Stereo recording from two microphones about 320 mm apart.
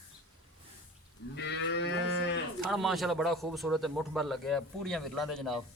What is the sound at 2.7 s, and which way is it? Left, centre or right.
A man's voice, centre.